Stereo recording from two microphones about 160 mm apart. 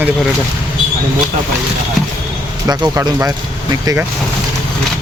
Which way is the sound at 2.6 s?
25° right (ahead or behind).